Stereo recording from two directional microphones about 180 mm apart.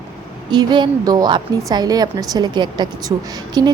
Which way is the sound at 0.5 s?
25° right (ahead or behind).